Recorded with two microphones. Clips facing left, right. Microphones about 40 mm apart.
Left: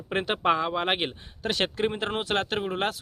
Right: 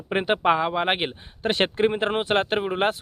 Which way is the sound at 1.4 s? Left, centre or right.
Right.